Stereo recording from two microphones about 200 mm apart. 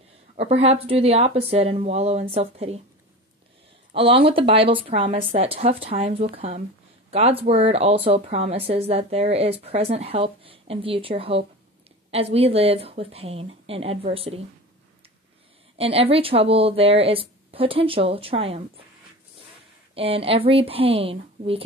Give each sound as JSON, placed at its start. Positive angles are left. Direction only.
{"t": 0.4, "sound": "speech", "side_deg": -30}
{"t": 3.9, "sound": "a woman's voice", "side_deg": -25}
{"t": 15.8, "sound": "a woman's voice", "side_deg": -30}
{"t": 19.9, "sound": "a woman's voice", "side_deg": -30}